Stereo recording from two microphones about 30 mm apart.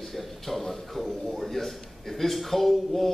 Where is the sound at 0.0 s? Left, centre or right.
Centre.